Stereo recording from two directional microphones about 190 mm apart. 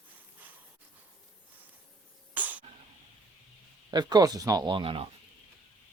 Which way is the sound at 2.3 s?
10° right (ahead or behind).